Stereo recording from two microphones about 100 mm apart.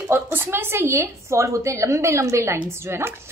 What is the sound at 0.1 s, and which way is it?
Speech, 20° right (ahead or behind).